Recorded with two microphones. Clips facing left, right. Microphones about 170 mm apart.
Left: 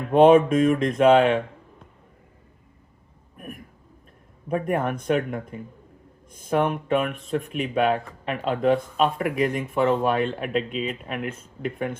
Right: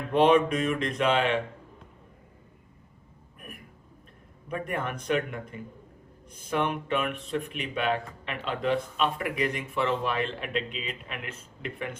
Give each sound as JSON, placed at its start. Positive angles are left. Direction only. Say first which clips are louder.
{"t": 0.1, "sound": "speech", "louder": "left 6 dB", "side_deg": 45}
{"t": 3.3, "sound": "a sound", "louder": "left 8 dB", "side_deg": 45}
{"t": 4.4, "sound": "speech", "louder": "left 8 dB", "side_deg": 45}
{"t": 6.5, "sound": "speech", "louder": "left 6 dB", "side_deg": 45}